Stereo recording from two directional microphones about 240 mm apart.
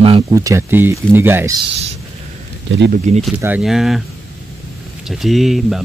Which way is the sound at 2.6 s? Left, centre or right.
Right.